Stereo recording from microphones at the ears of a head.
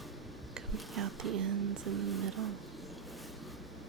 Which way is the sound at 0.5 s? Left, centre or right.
Right.